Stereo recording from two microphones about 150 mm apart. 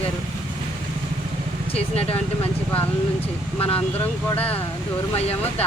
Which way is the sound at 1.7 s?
40° left (ahead or behind).